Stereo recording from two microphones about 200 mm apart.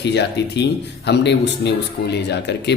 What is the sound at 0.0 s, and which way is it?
Speech, 60° left (ahead or behind).